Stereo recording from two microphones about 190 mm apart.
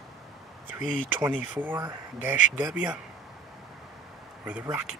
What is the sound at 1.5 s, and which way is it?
Speech, 10° right (ahead or behind).